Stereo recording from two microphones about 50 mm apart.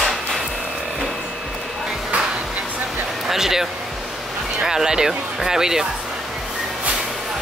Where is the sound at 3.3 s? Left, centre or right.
Centre.